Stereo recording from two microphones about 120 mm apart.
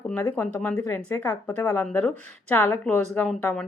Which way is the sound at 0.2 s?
25° left (ahead or behind).